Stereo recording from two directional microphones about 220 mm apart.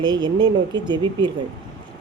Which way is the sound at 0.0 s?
20° right (ahead or behind).